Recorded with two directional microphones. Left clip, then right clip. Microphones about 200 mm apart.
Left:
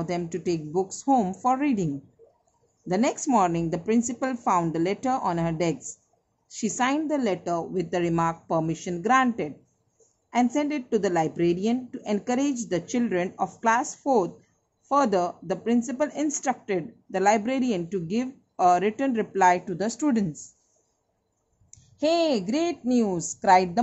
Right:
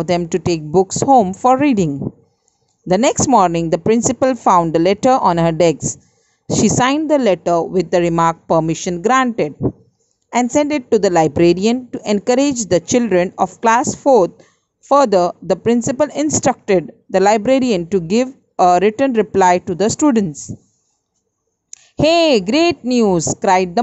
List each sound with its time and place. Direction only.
0.0 s speech: 35° right (ahead or behind)
2.9 s speech: 40° right (ahead or behind)
21.6 s a woman's voice: 35° right (ahead or behind)
23.4 s speech: 25° right (ahead or behind)